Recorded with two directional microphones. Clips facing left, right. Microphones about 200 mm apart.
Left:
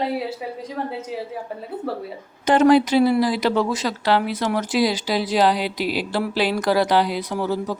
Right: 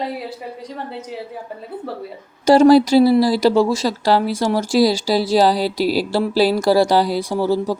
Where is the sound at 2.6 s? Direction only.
35° right (ahead or behind).